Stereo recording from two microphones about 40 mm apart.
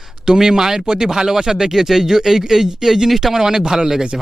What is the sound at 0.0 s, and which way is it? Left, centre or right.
Speech, centre.